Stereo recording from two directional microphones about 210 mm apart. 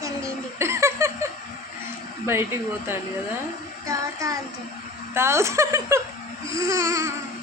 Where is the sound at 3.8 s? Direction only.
15° right (ahead or behind).